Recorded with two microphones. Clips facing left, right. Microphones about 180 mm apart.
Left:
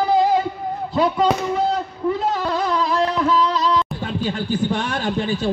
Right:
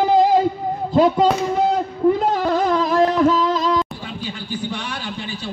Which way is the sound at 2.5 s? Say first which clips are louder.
Right 4 dB; 45° right (ahead or behind).